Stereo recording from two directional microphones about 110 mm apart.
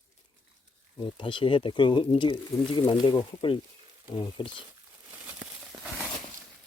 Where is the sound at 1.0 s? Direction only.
50° left (ahead or behind).